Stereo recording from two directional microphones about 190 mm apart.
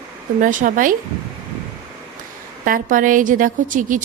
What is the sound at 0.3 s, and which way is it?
Speech, 45° right (ahead or behind).